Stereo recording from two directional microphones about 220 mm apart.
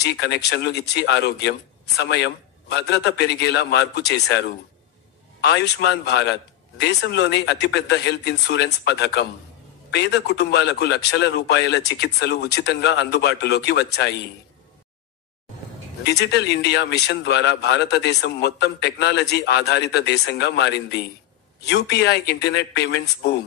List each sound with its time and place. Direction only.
0.0 s a man's voice: 50° left (ahead or behind)
16.0 s a man's voice: 50° left (ahead or behind)